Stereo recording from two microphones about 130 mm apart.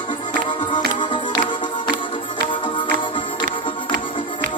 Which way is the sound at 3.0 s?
40° left (ahead or behind).